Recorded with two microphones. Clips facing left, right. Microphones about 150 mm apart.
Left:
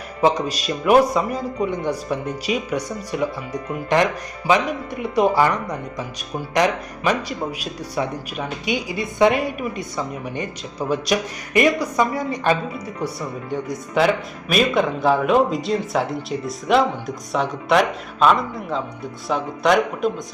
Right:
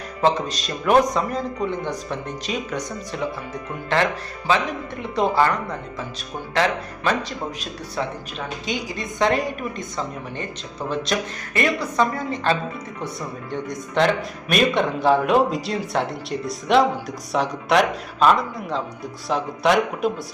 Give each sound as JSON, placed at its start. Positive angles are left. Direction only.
{"t": 0.2, "sound": "a man's voice", "side_deg": 10}